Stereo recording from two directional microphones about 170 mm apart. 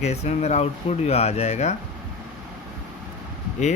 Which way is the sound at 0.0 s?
40° left (ahead or behind).